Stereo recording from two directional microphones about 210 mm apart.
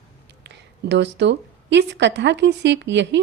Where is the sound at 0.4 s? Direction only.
55° right (ahead or behind).